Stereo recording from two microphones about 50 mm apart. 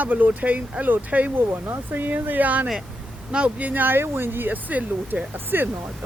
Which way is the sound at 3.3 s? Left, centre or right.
Right.